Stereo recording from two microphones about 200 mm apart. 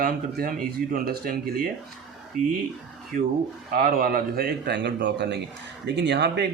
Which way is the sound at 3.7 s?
50° right (ahead or behind).